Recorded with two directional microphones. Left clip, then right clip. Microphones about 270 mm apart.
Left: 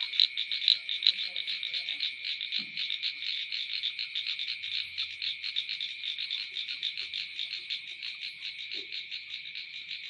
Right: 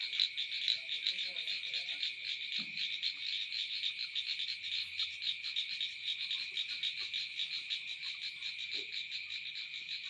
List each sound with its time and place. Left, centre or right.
0.2 s frog: left